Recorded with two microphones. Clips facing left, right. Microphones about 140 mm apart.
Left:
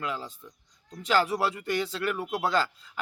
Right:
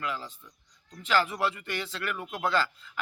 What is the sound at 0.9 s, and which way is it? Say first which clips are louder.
Speech: left 2 dB; 35° left (ahead or behind).